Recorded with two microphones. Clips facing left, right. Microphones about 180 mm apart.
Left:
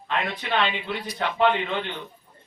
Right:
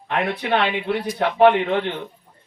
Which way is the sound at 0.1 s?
65° right (ahead or behind).